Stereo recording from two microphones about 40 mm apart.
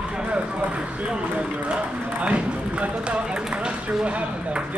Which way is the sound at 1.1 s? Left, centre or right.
Right.